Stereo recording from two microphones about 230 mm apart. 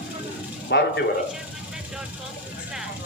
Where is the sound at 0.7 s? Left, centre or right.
Left.